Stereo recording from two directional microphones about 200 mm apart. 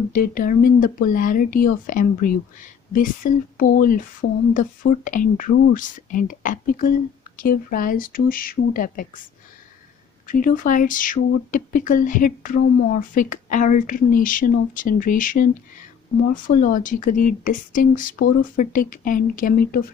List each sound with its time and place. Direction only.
0.1 s speech: 45° left (ahead or behind)
10.2 s speech: 45° left (ahead or behind)